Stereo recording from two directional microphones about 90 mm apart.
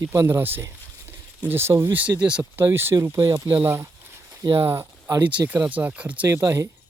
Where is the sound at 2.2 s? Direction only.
10° right (ahead or behind).